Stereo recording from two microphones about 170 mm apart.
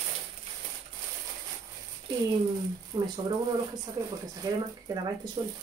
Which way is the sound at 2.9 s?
25° right (ahead or behind).